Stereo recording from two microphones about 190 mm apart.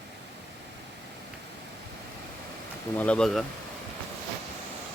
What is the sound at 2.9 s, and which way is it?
Speech, 5° left (ahead or behind).